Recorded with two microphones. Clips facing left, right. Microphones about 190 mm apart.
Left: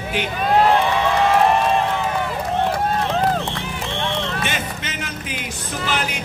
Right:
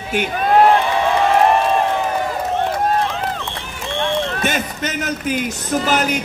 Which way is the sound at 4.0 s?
50° right (ahead or behind).